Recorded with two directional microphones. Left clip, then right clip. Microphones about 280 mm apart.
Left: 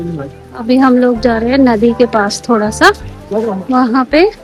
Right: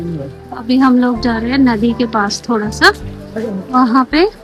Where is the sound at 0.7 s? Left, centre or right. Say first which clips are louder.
Left 3 dB; centre.